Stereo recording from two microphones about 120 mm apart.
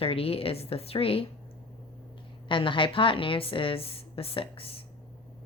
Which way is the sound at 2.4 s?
45° left (ahead or behind).